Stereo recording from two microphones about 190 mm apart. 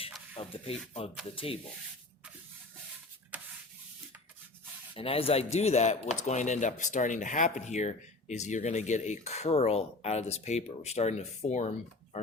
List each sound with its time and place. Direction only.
0.3 s speech: 30° left (ahead or behind)
3.3 s sanding: 10° right (ahead or behind)
4.9 s speech: 30° left (ahead or behind)